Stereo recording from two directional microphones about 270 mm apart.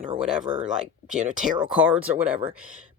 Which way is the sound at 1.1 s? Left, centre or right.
Right.